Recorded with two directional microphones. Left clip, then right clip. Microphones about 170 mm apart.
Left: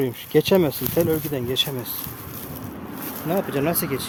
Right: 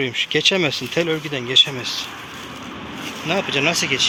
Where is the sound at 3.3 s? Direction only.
35° left (ahead or behind).